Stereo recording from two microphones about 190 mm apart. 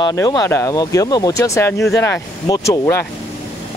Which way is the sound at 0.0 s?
20° left (ahead or behind).